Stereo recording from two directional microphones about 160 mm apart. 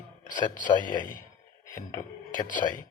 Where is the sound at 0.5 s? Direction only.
55° left (ahead or behind).